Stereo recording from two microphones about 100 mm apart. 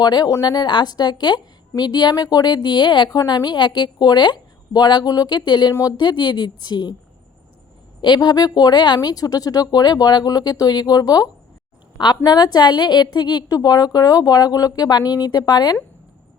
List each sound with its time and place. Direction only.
0.0 s a woman's voice: 45° left (ahead or behind)
8.0 s a woman's voice: 45° left (ahead or behind)